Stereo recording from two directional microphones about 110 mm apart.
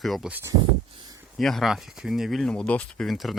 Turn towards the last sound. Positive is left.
turn(degrees=0)  # may be behind; listen again after turning